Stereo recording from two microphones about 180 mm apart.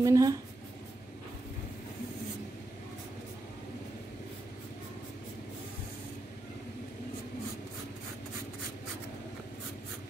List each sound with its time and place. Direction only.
0.0 s speech: 20° right (ahead or behind)